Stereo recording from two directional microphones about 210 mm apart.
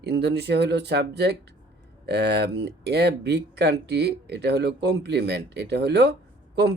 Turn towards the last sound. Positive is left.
turn(degrees=-50)  # may be behind; listen again after turning